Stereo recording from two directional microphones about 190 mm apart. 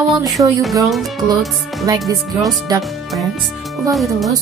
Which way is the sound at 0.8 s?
Centre (ahead or behind).